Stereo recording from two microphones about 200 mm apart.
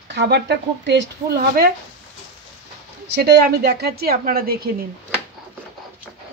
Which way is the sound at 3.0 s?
55° right (ahead or behind).